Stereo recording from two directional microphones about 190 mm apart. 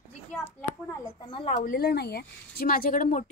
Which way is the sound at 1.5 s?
50° left (ahead or behind).